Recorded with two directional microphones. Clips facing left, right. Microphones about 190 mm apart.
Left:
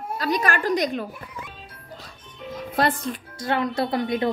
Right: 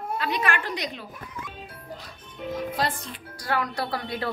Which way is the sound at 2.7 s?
55° left (ahead or behind).